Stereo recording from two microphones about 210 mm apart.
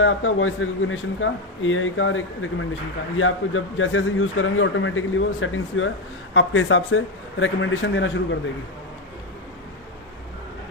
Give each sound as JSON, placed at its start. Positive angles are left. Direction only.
{"t": 0.0, "sound": "a man's voice", "side_deg": 70}